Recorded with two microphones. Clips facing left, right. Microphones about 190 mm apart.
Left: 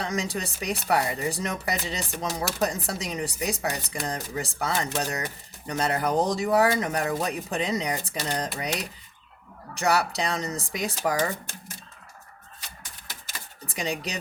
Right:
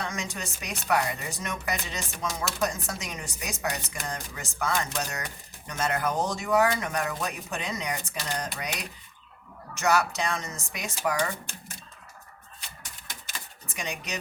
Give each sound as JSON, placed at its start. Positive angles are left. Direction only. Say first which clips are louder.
{"t": 0.0, "sound": "speech", "louder": "left 5 dB", "side_deg": 35}
{"t": 9.7, "sound": "speech", "louder": "left 1 dB", "side_deg": 35}
{"t": 13.7, "sound": "speech", "louder": "left 5 dB", "side_deg": 35}